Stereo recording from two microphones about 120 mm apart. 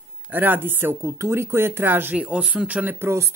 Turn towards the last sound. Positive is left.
turn(degrees=-20)  # may be behind; listen again after turning